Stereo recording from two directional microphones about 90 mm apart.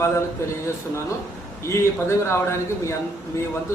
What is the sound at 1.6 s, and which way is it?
A man's voice, 30° left (ahead or behind).